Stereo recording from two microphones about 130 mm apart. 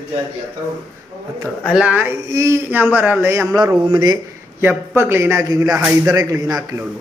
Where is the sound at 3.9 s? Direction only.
35° right (ahead or behind).